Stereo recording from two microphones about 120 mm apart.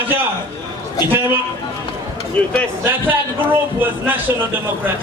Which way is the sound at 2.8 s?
15° right (ahead or behind).